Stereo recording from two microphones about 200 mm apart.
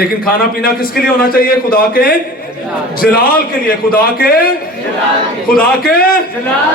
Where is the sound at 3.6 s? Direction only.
45° left (ahead or behind).